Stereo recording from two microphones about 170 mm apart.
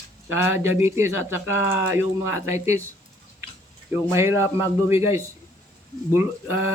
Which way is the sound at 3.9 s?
15° right (ahead or behind).